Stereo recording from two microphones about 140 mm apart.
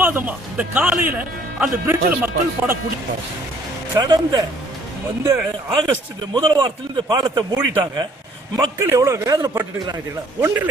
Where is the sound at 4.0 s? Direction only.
30° right (ahead or behind).